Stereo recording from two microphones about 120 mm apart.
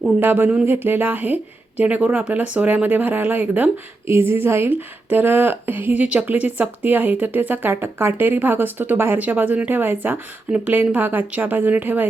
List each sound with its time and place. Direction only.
0.2 s speech: 15° right (ahead or behind)